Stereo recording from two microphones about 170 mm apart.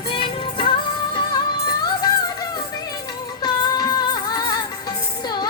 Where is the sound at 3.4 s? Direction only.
25° left (ahead or behind).